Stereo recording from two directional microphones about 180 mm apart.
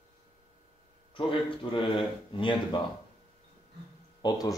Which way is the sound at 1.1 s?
30° left (ahead or behind).